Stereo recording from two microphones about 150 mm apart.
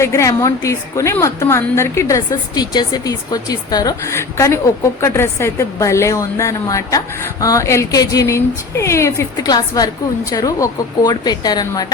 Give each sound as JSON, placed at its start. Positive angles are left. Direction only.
{"t": 0.0, "sound": "a woman's voice", "side_deg": 20}